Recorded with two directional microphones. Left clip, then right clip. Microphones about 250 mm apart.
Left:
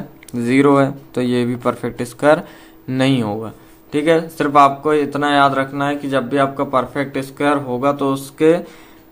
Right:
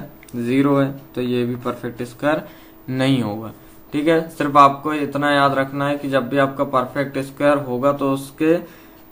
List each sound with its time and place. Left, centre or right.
0.3 s speech: left